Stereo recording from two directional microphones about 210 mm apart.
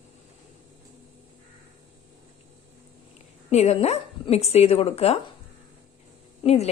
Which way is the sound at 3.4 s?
30° left (ahead or behind).